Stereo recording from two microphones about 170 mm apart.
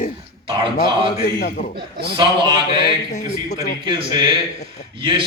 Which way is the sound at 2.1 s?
25° right (ahead or behind).